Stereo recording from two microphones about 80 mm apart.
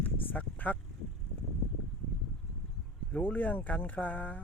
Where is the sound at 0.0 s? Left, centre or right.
Left.